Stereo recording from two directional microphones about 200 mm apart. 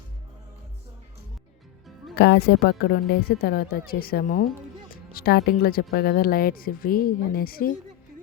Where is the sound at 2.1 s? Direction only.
55° left (ahead or behind).